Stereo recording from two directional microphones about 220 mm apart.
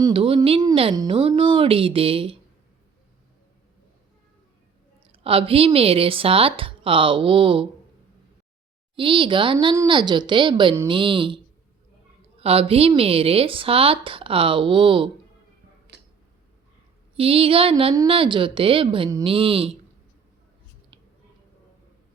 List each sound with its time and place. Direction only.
0.0 s a woman's voice: 25° right (ahead or behind)
5.0 s a woman's voice: 25° right (ahead or behind)
9.0 s a woman's voice: 25° right (ahead or behind)
12.4 s a woman's voice: 25° right (ahead or behind)
15.9 s tick-tock: 50° right (ahead or behind)
17.2 s a woman's voice: 25° right (ahead or behind)